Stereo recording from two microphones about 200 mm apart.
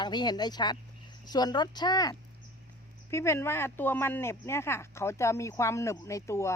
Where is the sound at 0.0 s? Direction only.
20° left (ahead or behind).